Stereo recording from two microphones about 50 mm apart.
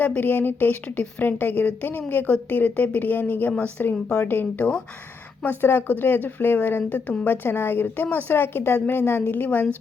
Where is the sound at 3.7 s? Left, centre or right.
Left.